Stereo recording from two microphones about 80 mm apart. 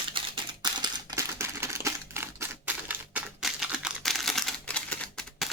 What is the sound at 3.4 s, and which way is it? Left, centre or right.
Typing, centre.